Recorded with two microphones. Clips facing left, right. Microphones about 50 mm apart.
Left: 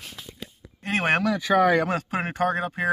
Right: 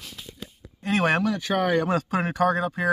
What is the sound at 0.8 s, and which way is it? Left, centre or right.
Speech, left.